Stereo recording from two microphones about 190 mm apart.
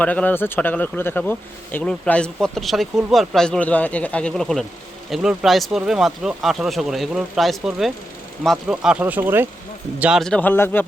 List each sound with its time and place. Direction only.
0.0 s speech: 10° left (ahead or behind)